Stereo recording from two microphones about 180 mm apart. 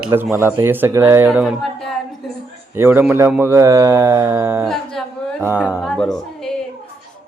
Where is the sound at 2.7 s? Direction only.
10° right (ahead or behind).